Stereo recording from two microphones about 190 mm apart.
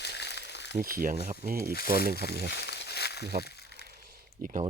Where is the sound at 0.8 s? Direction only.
50° right (ahead or behind).